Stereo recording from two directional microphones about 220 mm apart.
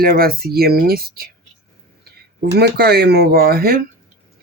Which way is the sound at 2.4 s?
50° right (ahead or behind).